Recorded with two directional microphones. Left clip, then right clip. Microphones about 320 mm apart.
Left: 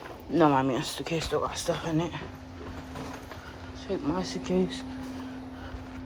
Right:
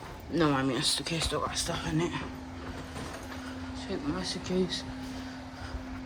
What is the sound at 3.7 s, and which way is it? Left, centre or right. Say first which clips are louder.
Speech: left 5 dB; centre.